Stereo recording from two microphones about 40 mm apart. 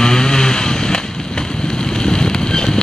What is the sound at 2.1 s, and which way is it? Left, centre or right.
Wind, centre.